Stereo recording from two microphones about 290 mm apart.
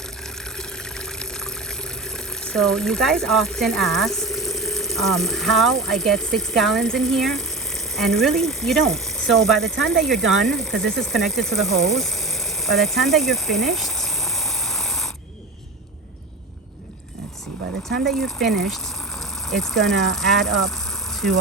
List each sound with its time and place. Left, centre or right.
0.5 s water: centre
2.1 s speech: centre
17.8 s speech: right
18.2 s speech: centre